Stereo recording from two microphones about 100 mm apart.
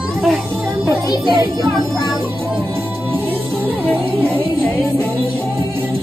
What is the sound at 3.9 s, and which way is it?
Music, 20° right (ahead or behind).